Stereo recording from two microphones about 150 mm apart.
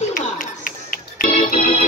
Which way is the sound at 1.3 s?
55° left (ahead or behind).